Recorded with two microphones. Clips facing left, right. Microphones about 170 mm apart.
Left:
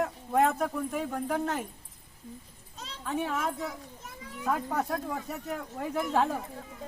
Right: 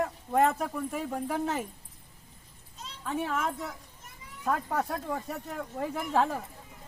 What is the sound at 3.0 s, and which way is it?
Speech, centre (ahead or behind).